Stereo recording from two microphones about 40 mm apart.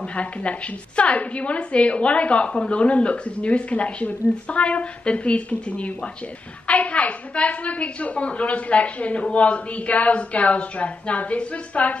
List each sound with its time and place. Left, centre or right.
0.0 s a woman's voice: left